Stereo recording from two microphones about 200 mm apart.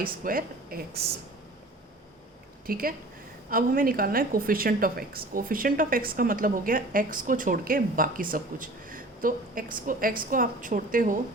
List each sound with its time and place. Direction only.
0.0 s a woman's voice: 45° right (ahead or behind)
2.6 s a woman's voice: 45° right (ahead or behind)